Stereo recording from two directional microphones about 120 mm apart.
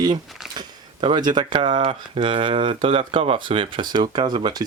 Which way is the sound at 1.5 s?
50° right (ahead or behind).